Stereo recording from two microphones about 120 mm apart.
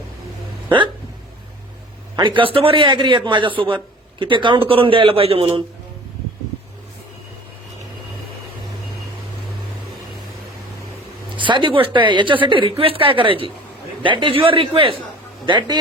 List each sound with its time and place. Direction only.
2.1 s speech: 40° right (ahead or behind)
11.3 s a man's voice: 40° right (ahead or behind)